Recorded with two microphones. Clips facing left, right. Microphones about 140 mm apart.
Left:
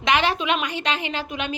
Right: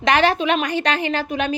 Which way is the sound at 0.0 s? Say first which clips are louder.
Right 4 dB; 40° right (ahead or behind).